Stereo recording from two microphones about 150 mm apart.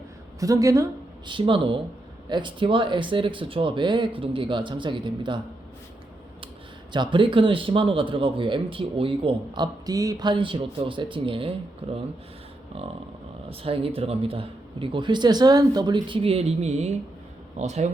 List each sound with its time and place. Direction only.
0.3 s speech: 20° right (ahead or behind)
1.3 s a man's voice: 35° right (ahead or behind)
6.9 s a man's voice: 30° right (ahead or behind)
13.5 s a man's voice: 40° right (ahead or behind)